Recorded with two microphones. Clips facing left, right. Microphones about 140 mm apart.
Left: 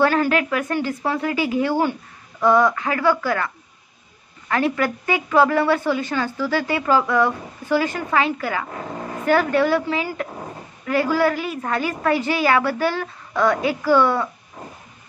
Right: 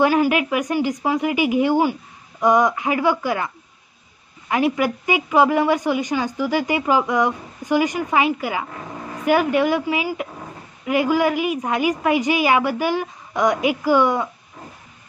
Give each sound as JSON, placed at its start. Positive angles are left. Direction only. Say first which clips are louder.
{"t": 0.0, "sound": "a woman's voice", "louder": "right 1 dB", "side_deg": -15}